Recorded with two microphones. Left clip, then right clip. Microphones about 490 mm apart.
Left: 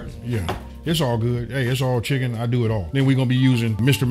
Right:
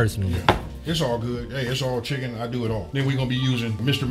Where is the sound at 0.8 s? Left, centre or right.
Left.